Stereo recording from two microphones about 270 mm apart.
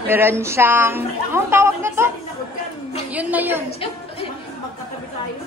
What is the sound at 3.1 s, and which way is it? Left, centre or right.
Speech, centre.